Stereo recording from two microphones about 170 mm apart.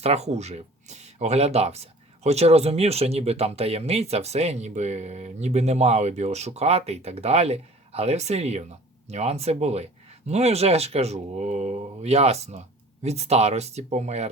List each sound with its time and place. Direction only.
0.0 s speech: 40° right (ahead or behind)